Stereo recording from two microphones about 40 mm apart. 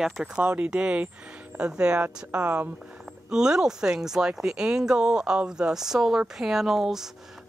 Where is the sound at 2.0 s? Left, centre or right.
Right.